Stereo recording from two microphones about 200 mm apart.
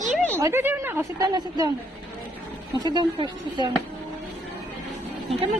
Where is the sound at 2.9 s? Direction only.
20° right (ahead or behind).